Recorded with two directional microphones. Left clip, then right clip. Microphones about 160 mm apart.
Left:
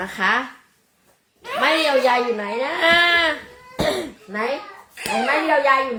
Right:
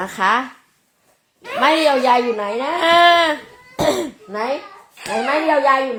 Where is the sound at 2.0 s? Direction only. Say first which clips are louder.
Right 3 dB; 60° right (ahead or behind).